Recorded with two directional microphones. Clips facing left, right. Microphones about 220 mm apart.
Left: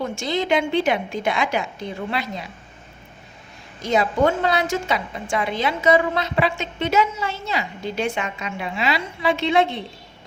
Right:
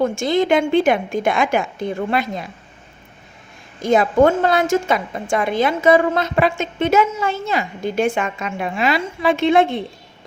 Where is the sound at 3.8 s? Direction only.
50° right (ahead or behind).